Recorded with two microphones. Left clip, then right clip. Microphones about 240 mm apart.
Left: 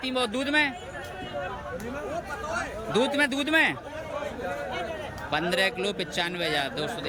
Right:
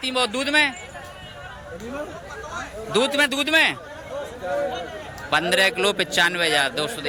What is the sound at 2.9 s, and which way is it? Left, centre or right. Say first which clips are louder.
Speech: right 5 dB; centre.